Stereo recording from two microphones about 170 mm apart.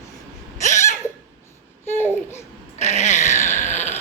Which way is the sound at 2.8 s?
40° left (ahead or behind).